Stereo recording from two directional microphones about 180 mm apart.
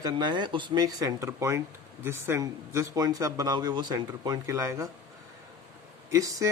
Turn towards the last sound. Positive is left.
turn(degrees=-20)  # may be behind; listen again after turning